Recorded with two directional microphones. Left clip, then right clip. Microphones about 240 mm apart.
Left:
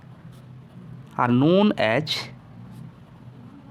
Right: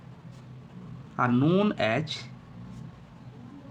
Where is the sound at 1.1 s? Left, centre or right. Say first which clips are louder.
Left 6 dB; left.